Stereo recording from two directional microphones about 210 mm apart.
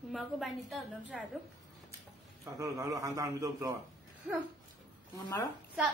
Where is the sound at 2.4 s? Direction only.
15° right (ahead or behind).